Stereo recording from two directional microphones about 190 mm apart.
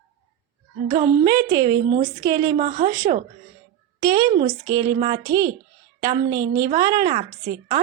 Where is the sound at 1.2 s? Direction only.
15° right (ahead or behind).